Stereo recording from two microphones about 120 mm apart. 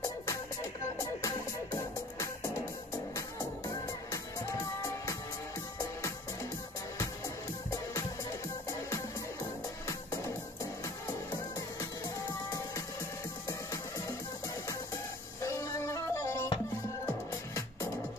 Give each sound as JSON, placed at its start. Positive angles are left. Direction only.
{"t": 1.2, "sound": "music", "side_deg": 25}
{"t": 7.7, "sound": "music", "side_deg": 25}
{"t": 12.4, "sound": "music", "side_deg": 25}
{"t": 15.4, "sound": "music", "side_deg": 25}